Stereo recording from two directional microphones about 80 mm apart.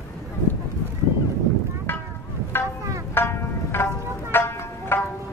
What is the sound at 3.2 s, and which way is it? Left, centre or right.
Music, left.